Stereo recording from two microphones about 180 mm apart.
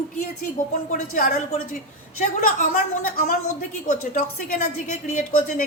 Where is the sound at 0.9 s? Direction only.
45° left (ahead or behind).